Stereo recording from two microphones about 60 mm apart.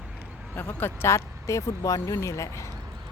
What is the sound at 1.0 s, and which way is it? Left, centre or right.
Speech, left.